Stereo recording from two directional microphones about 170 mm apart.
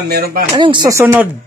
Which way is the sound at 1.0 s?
10° right (ahead or behind).